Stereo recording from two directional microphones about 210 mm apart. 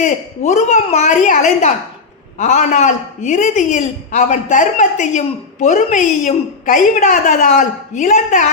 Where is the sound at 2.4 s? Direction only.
35° left (ahead or behind).